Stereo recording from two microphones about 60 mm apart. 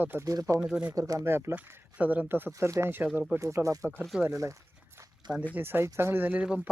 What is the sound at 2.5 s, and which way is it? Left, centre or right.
Speech, right.